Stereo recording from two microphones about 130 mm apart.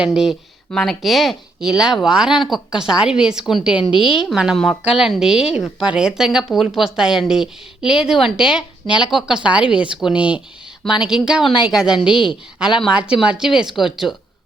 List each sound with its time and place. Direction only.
0.0 s a woman's voice: 5° right (ahead or behind)
12.1 s a woman's voice: 40° left (ahead or behind)
12.5 s speech: 5° right (ahead or behind)